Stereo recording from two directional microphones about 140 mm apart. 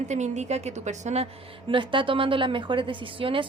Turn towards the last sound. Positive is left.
turn(degrees=-40)  # may be behind; listen again after turning